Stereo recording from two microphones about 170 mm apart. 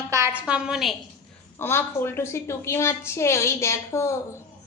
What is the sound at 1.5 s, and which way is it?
A woman's voice, 15° left (ahead or behind).